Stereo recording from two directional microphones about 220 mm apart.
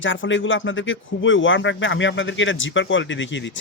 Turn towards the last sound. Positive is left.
turn(degrees=55)  # may be behind; listen again after turning